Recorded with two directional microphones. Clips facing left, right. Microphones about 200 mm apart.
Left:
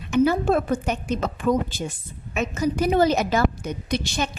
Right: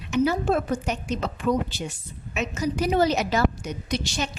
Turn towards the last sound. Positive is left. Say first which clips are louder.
# left 2 dB
turn(degrees=55)  # may be behind; listen again after turning